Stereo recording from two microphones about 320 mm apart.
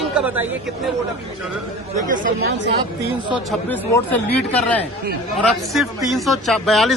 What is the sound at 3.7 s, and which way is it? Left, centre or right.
A man's voice, centre.